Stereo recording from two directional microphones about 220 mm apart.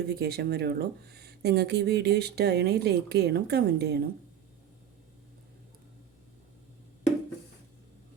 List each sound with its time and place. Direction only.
0.1 s speech: 45° right (ahead or behind)